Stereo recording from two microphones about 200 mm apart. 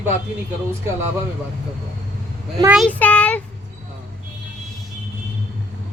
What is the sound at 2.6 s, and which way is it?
Speech, centre (ahead or behind).